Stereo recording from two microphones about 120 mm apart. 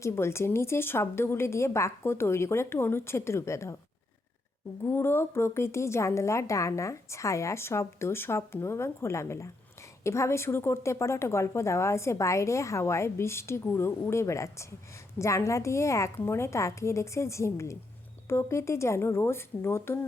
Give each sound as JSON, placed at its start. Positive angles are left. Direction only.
{"t": 0.0, "sound": "speech", "side_deg": 20}
{"t": 4.9, "sound": "speech", "side_deg": 20}